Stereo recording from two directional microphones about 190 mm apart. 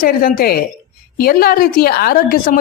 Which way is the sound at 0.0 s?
50° left (ahead or behind).